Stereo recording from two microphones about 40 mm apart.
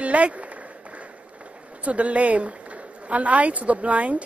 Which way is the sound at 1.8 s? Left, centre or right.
Right.